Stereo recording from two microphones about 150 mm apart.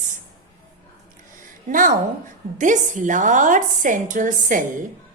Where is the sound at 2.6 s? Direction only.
60° right (ahead or behind).